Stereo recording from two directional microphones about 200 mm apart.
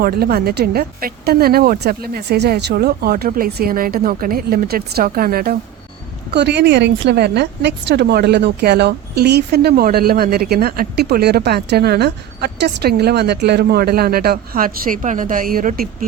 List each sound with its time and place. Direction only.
0.0 s a woman's voice: 50° right (ahead or behind)